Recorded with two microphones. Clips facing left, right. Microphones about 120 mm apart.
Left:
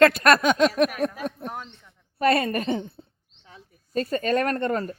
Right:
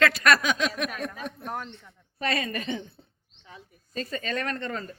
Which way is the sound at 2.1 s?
55° left (ahead or behind).